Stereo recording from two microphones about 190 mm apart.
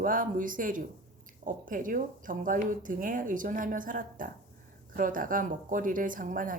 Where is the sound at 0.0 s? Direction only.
45° right (ahead or behind).